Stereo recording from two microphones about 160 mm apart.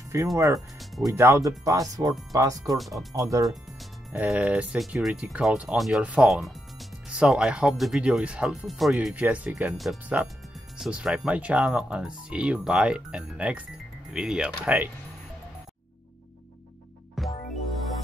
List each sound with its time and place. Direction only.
0.1 s speech: 20° right (ahead or behind)
0.6 s music: centre (ahead or behind)
1.0 s speech: 20° right (ahead or behind)
2.8 s speech: centre (ahead or behind)
3.2 s speech: 20° right (ahead or behind)
4.1 s speech: 5° right (ahead or behind)
17.2 s music: centre (ahead or behind)